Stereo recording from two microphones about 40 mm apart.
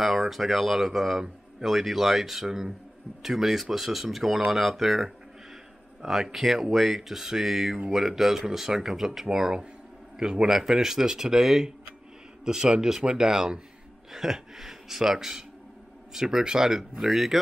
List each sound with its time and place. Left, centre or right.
0.0 s speech: centre